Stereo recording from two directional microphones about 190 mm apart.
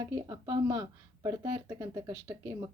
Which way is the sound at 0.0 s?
20° right (ahead or behind).